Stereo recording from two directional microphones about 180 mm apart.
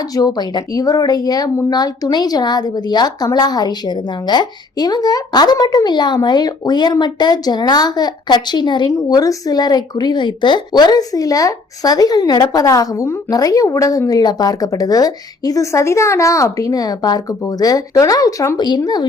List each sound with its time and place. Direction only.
0.1 s a woman's voice: 20° left (ahead or behind)